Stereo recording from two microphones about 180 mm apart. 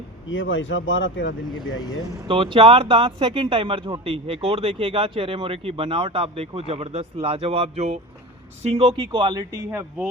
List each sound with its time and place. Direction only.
0.3 s speech: 90° left
2.2 s speech: 30° right (ahead or behind)